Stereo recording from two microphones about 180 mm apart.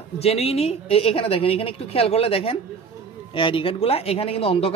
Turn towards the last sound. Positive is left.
turn(degrees=30)  # may be behind; listen again after turning